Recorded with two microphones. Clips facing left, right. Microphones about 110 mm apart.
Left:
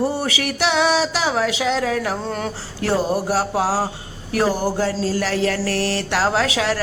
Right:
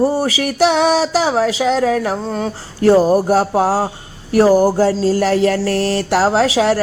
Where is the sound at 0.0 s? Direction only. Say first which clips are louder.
Right 6 dB; 35° right (ahead or behind).